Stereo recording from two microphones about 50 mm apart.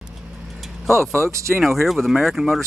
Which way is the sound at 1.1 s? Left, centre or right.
Right.